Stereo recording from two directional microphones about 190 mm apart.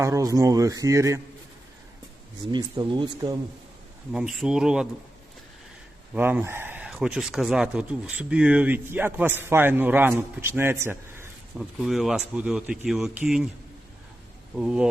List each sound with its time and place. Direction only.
0.0 s speech: 15° right (ahead or behind)
2.5 s speech: 25° right (ahead or behind)
4.1 s speech: centre (ahead or behind)
6.1 s speech: 10° right (ahead or behind)
14.5 s speech: 5° right (ahead or behind)